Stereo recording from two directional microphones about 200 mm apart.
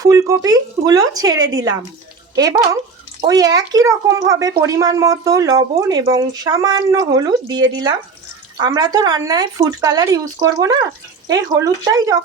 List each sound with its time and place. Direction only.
0.0 s speech: 15° right (ahead or behind)